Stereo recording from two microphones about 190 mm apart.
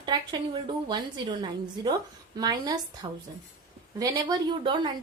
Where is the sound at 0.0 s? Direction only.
25° right (ahead or behind).